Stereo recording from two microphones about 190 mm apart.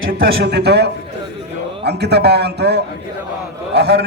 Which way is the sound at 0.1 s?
55° right (ahead or behind).